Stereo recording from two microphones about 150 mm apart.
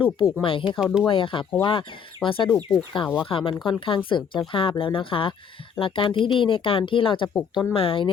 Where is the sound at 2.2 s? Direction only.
5° left (ahead or behind).